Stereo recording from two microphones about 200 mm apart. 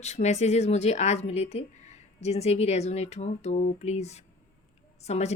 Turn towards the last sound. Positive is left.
turn(degrees=35)  # may be behind; listen again after turning